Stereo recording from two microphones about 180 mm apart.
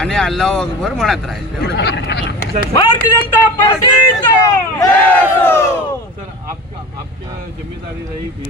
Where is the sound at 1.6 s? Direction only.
70° left (ahead or behind).